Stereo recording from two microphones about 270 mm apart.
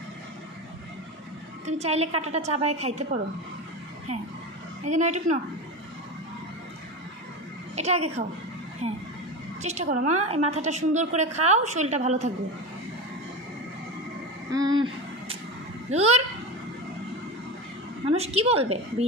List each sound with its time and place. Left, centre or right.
1.7 s a woman's voice: right
4.8 s a woman's voice: right
7.7 s a woman's voice: right
14.5 s a sound: centre
15.9 s a woman's voice: right
18.0 s a woman's voice: right